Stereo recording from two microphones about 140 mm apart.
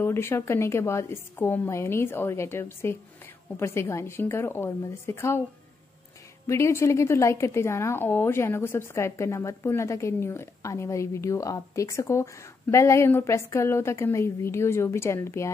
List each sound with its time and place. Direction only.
0.0 s a woman's voice: 15° left (ahead or behind)
6.4 s a woman's voice: 20° left (ahead or behind)